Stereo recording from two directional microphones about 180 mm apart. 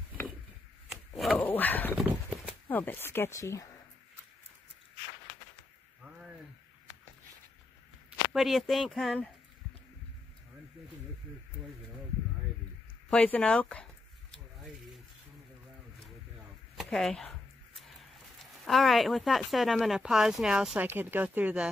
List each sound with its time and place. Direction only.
0.8 s speech: centre (ahead or behind); by 3.7 s 20° left (ahead or behind)
8.3 s speech: centre (ahead or behind)
13.1 s speech: 5° left (ahead or behind)
14.3 s a sound: centre (ahead or behind)
16.7 s a sound: centre (ahead or behind)
18.4 s speech: centre (ahead or behind)